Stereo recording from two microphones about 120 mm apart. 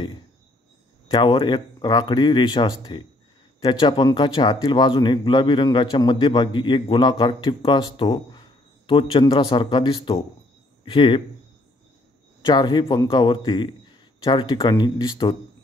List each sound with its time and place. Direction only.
1.1 s speech: 40° left (ahead or behind)
12.4 s speech: 40° left (ahead or behind)